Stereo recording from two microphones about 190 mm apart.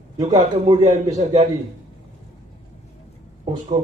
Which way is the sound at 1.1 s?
35° right (ahead or behind).